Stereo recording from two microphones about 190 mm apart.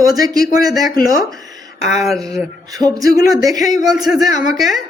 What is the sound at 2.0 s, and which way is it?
Speech, centre (ahead or behind).